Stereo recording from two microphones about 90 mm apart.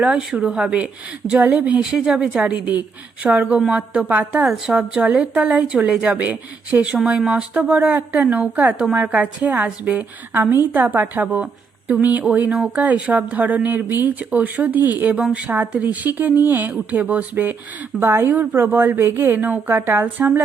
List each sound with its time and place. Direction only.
0.0 s a woman's voice: 5° right (ahead or behind)
4.4 s a woman's voice: 5° right (ahead or behind)
4.7 s a woman's voice: 15° right (ahead or behind)